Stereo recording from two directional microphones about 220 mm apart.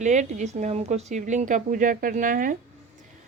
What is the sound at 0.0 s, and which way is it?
A woman's voice, 30° right (ahead or behind).